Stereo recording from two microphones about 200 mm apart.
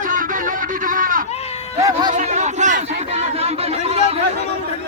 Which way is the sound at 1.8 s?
20° right (ahead or behind).